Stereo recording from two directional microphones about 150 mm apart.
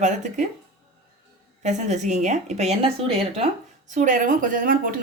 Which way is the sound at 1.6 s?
50° right (ahead or behind).